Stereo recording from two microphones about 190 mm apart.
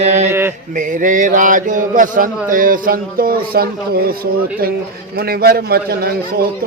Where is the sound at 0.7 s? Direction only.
45° right (ahead or behind).